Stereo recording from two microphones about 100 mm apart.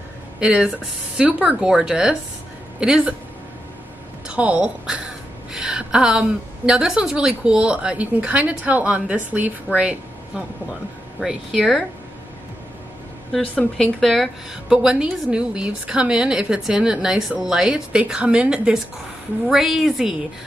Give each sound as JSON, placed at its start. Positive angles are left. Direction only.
{"t": 0.4, "sound": "a woman's voice", "side_deg": -10}
{"t": 4.3, "sound": "a woman's voice", "side_deg": -10}
{"t": 11.1, "sound": "a woman's voice", "side_deg": 0}
{"t": 13.3, "sound": "a woman's voice", "side_deg": 5}